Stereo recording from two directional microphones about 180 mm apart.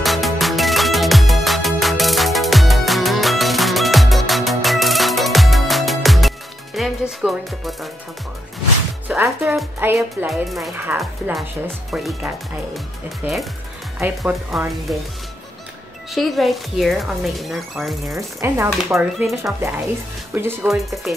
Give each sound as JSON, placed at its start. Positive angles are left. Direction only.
{"t": 0.0, "sound": "music", "side_deg": 0}
{"t": 9.0, "sound": "speech", "side_deg": -10}
{"t": 10.3, "sound": "speech", "side_deg": 0}
{"t": 16.1, "sound": "speech", "side_deg": 0}
{"t": 18.0, "sound": "speech", "side_deg": -15}
{"t": 18.9, "sound": "speech", "side_deg": 0}
{"t": 20.6, "sound": "speech", "side_deg": 0}